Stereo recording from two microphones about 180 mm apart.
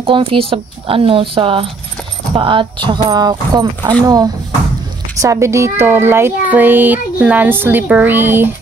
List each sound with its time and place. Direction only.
0.0 s a woman's voice: 30° right (ahead or behind)
5.2 s speech: 15° right (ahead or behind)